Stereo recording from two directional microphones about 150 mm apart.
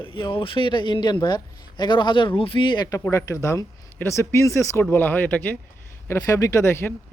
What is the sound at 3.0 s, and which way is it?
Speech, 20° left (ahead or behind).